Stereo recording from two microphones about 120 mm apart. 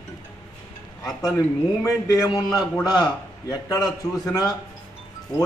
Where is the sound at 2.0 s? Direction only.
30° left (ahead or behind).